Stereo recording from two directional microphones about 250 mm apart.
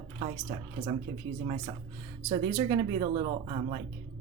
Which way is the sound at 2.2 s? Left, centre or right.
Right.